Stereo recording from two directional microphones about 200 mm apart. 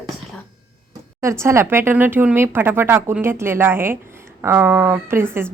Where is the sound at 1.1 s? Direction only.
15° right (ahead or behind).